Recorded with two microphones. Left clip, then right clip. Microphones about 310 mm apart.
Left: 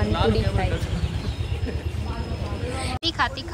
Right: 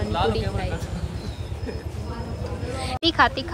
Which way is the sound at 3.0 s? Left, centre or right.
Centre.